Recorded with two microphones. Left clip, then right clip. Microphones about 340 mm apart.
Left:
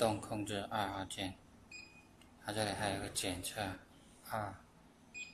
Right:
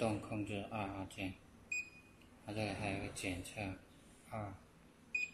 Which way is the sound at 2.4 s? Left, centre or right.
Left.